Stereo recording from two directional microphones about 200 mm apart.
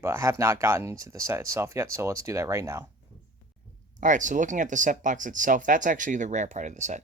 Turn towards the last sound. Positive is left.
turn(degrees=-35)  # may be behind; listen again after turning